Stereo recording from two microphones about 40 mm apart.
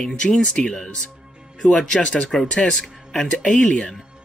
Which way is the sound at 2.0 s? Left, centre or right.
Left.